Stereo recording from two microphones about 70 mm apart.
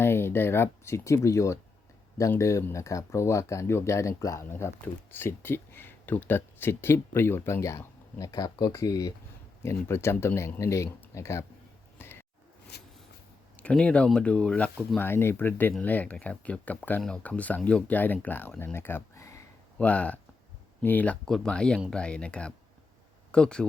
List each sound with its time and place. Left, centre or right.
0.0 s speech: left
4.4 s speech: left
8.2 s speech: left
8.7 s speech: left
9.6 s speech: left
11.9 s a sound: left
13.6 s speech: centre
15.0 s speech: left
19.8 s speech: left
21.2 s speech: centre